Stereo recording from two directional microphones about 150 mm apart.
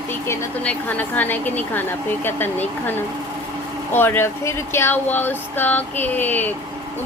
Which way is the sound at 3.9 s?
15° left (ahead or behind).